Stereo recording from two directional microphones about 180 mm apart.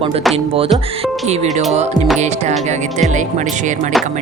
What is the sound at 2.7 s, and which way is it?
Music, 40° right (ahead or behind).